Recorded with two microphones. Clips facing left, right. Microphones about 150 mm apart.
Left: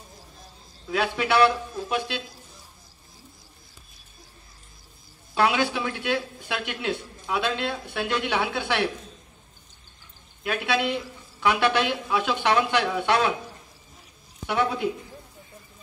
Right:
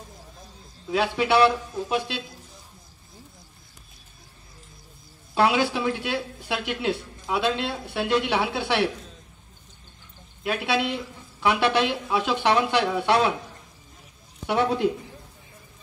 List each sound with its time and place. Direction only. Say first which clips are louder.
0.9 s speech: right 1 dB; 25° right (ahead or behind)
5.3 s speech: right 2 dB; 30° right (ahead or behind)
10.4 s speech: even; 30° right (ahead or behind)